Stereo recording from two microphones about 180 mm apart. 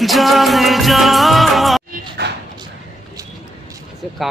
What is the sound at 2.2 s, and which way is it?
Dog, 75° right (ahead or behind).